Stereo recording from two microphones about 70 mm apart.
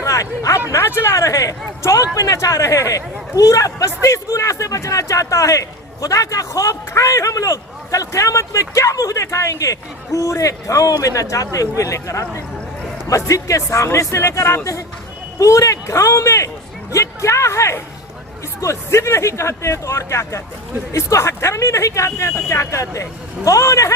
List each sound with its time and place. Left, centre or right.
0.0 s a sound: left
0.7 s speech: left
1.1 s speech: left